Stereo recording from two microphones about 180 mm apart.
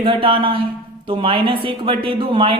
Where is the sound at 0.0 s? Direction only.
30° right (ahead or behind).